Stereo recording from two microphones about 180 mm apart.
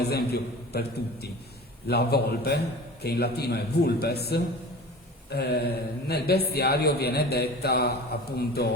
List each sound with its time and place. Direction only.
0.0 s a man's voice: 65° left (ahead or behind)